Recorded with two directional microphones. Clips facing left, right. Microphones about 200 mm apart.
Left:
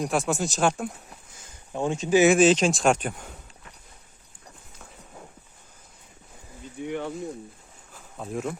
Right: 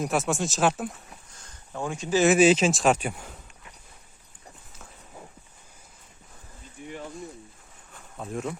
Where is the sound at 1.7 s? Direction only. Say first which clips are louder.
Left 4 dB; 20° left (ahead or behind).